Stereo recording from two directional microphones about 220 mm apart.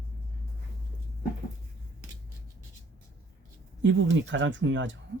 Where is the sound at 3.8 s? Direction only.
60° right (ahead or behind).